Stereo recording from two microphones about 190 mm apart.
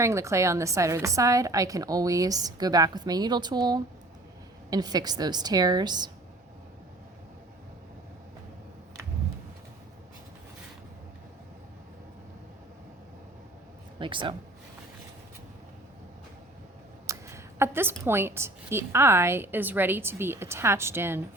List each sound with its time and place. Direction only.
0.0 s a woman's voice: 15° right (ahead or behind)
14.0 s a woman's voice: 25° right (ahead or behind)
17.1 s a woman's voice: 15° right (ahead or behind)